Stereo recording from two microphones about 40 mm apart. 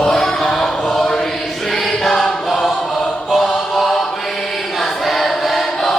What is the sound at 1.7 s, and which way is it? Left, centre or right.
Choir, centre.